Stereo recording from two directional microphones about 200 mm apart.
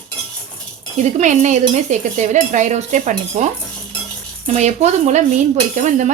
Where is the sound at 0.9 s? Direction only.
35° right (ahead or behind).